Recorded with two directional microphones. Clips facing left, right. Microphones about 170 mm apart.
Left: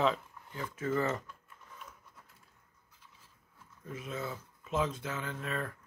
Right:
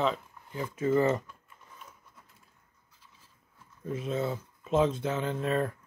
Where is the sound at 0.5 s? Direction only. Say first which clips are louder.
Right 7 dB; 15° right (ahead or behind).